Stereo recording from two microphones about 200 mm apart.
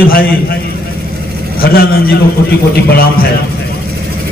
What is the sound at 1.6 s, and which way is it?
A man's voice, 50° left (ahead or behind).